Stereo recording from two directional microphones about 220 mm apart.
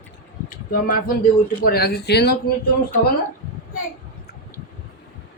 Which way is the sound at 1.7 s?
45° left (ahead or behind).